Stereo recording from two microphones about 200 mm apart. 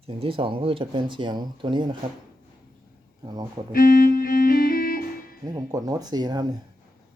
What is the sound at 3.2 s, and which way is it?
Speech, 20° right (ahead or behind).